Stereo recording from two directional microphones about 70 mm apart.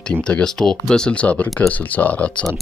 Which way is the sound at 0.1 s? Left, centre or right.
Centre.